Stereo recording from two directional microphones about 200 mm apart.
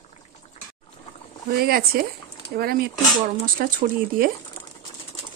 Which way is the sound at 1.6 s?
50° right (ahead or behind).